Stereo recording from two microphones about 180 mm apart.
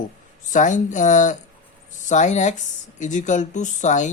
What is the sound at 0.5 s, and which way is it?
Speech, 45° left (ahead or behind).